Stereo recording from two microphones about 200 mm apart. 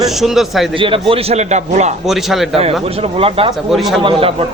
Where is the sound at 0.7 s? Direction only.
25° right (ahead or behind).